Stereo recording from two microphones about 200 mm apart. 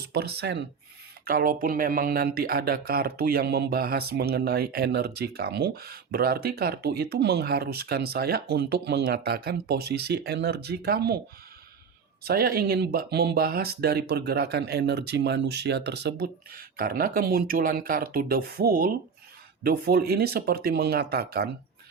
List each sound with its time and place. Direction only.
0.1 s speech: 55° right (ahead or behind)
12.2 s speech: 50° right (ahead or behind)